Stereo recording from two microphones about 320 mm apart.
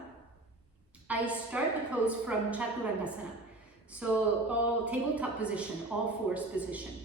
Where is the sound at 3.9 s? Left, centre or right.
Centre.